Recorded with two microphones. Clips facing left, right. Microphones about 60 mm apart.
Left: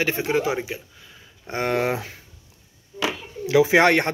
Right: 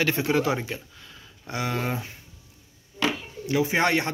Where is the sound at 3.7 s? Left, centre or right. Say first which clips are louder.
Left 5 dB; left.